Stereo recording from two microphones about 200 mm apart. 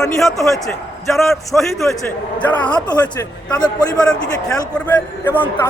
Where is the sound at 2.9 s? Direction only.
20° left (ahead or behind).